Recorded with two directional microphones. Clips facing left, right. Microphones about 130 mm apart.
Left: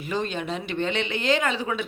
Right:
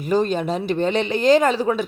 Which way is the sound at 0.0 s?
40° right (ahead or behind).